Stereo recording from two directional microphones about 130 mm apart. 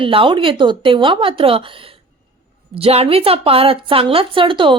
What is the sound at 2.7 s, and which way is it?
A woman's voice, 50° right (ahead or behind).